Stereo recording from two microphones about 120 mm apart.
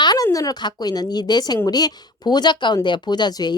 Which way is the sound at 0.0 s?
35° left (ahead or behind).